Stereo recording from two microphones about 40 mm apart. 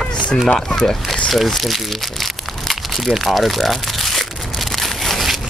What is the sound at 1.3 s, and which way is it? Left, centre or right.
Crumpling, centre.